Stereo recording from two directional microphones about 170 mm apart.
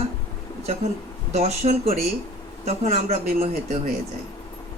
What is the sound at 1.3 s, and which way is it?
Speech, 40° right (ahead or behind).